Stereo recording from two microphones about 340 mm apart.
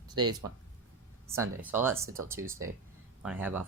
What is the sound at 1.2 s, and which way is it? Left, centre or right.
Speech, centre.